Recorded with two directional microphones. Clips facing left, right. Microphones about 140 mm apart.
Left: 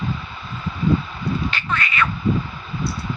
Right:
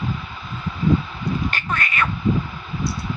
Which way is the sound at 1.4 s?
45° right (ahead or behind).